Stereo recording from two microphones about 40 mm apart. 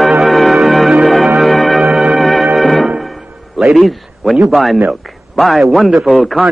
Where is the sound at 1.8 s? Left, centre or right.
Centre.